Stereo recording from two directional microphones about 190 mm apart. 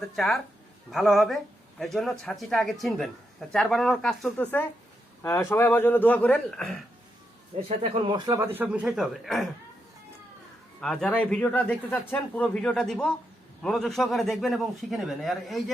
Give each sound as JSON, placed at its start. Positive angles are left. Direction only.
{"t": 0.9, "sound": "a man's voice", "side_deg": 0}
{"t": 7.8, "sound": "speech", "side_deg": -25}
{"t": 8.5, "sound": "speech", "side_deg": -5}
{"t": 10.8, "sound": "speech", "side_deg": 5}